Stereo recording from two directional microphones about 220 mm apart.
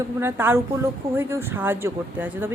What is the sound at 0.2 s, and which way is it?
Speech, 10° right (ahead or behind).